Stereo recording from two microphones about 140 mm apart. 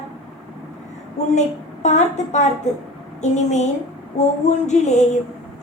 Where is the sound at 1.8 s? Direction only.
55° left (ahead or behind).